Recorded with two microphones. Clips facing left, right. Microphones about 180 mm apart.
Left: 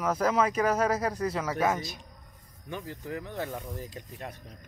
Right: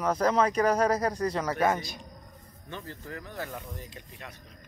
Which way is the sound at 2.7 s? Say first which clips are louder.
Left 4 dB; 15° left (ahead or behind).